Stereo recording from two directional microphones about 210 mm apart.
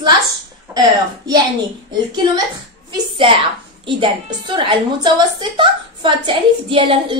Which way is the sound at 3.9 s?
25° right (ahead or behind).